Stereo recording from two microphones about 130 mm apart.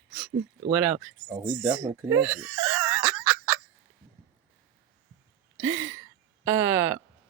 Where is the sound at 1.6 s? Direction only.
10° right (ahead or behind).